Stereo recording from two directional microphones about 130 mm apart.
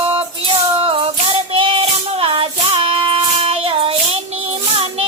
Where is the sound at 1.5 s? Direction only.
40° right (ahead or behind).